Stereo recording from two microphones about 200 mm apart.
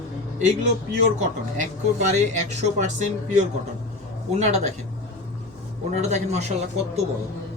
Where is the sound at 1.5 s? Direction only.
35° right (ahead or behind).